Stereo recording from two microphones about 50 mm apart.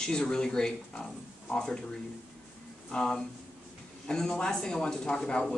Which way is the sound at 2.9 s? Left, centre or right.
Centre.